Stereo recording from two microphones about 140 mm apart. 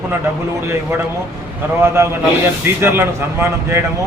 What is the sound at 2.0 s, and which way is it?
A man's voice, 20° right (ahead or behind).